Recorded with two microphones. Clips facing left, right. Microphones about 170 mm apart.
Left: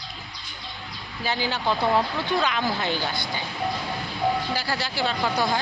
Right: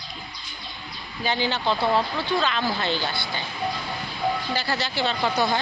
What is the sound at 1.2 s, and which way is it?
Speech, 5° left (ahead or behind).